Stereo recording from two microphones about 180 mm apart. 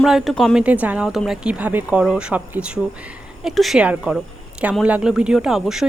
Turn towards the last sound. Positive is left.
turn(degrees=0)  # may be behind; listen again after turning